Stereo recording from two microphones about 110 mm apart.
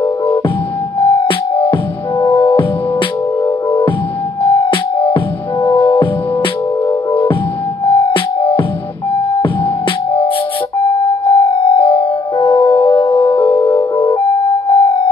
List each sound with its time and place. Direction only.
0.9 s music: 50° left (ahead or behind)
3.4 s music: 40° left (ahead or behind)
7.8 s music: 50° left (ahead or behind)
11.2 s music: 50° left (ahead or behind)
12.4 s music: 20° left (ahead or behind)
13.9 s music: 45° left (ahead or behind)
14.7 s a sound: 50° left (ahead or behind)